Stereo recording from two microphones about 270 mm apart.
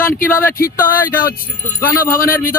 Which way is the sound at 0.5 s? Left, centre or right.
Left.